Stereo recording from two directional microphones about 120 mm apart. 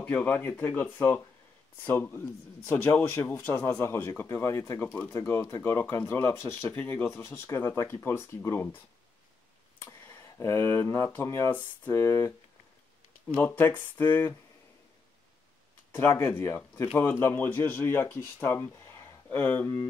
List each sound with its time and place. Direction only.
0.0 s speech: 15° left (ahead or behind)
4.8 s speech: 10° left (ahead or behind)
5.1 s speech: 25° left (ahead or behind)
9.8 s speech: 20° left (ahead or behind)
15.9 s speech: 15° left (ahead or behind)